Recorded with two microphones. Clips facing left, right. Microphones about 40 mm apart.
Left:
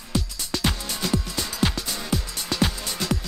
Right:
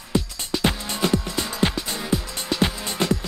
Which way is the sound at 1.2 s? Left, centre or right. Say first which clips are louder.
Right 2 dB; right.